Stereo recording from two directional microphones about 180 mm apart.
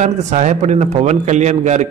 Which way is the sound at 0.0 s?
40° right (ahead or behind).